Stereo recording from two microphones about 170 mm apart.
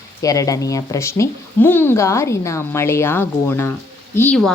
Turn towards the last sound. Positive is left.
turn(degrees=10)  # may be behind; listen again after turning